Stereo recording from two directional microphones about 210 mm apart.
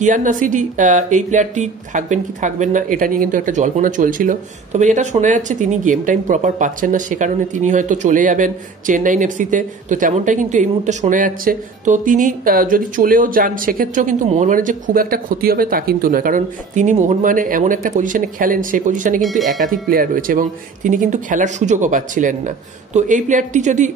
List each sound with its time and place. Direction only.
0.0 s speech: 40° right (ahead or behind)
19.2 s speech: centre (ahead or behind)
19.6 s speech: 40° right (ahead or behind)